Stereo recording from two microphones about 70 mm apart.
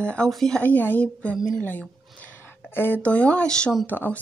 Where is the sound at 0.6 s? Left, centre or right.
Left.